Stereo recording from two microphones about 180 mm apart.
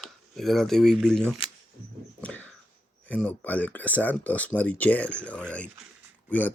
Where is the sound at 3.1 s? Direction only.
10° left (ahead or behind).